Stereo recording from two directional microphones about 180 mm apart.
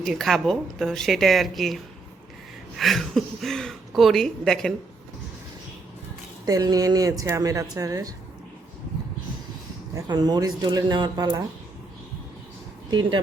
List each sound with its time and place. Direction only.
0.0 s a woman's voice: centre (ahead or behind)
6.4 s speech: 20° right (ahead or behind)
9.9 s speech: 25° right (ahead or behind)